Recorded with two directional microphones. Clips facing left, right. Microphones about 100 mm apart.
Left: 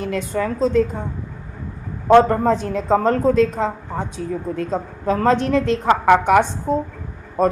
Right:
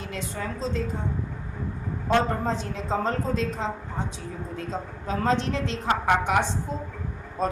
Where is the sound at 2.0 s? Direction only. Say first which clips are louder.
Left 11 dB; 65° left (ahead or behind).